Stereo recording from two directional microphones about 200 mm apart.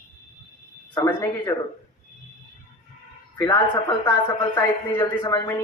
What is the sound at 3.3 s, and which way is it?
Speech, 20° left (ahead or behind).